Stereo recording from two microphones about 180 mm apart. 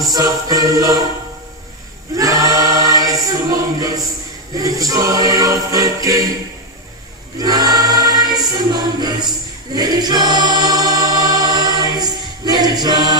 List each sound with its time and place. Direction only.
0.0 s music: 20° right (ahead or behind)
2.1 s choir: 20° right (ahead or behind)
7.3 s choir: 20° right (ahead or behind)